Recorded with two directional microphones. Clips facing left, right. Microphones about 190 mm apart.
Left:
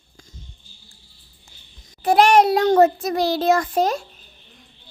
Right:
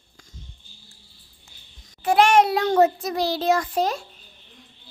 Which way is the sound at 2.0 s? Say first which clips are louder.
Left 2 dB; 40° left (ahead or behind).